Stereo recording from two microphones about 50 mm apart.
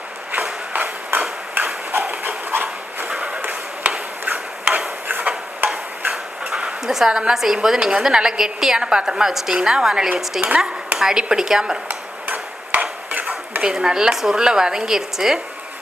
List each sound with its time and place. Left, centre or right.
0.7 s ping: right
1.5 s tick-tock: right
2.0 s a sound: right
3.2 s a sound: right
5.0 s tick-tock: right
6.1 s dishes: right
7.2 s a woman's voice: centre
11.9 s tick-tock: right
12.8 s a sound: right
13.6 s a woman's voice: centre